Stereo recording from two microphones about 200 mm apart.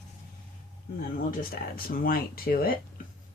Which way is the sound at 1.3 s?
45° left (ahead or behind).